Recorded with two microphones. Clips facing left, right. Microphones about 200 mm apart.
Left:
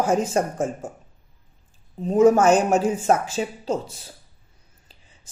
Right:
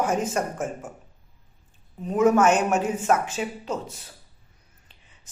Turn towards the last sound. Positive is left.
turn(degrees=30)  # may be behind; listen again after turning